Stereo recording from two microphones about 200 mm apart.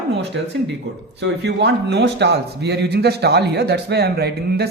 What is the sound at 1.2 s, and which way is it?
A man's voice, 60° right (ahead or behind).